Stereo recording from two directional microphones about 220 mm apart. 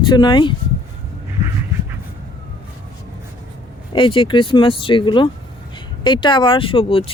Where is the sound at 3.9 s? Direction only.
20° left (ahead or behind).